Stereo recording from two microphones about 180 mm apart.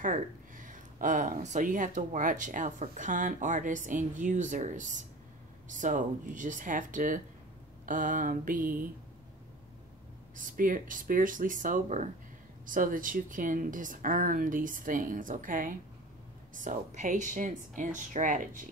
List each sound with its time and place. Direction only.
0.0 s speech: 45° right (ahead or behind)
10.3 s speech: 50° right (ahead or behind)